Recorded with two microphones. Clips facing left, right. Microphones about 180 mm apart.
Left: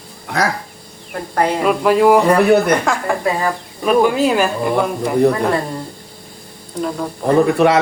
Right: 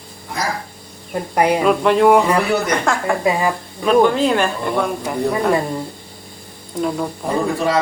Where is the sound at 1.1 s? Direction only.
15° right (ahead or behind).